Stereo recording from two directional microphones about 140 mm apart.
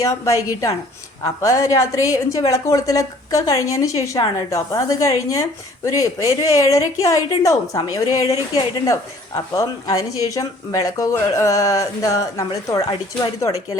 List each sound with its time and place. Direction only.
0.0 s a woman's voice: 25° left (ahead or behind)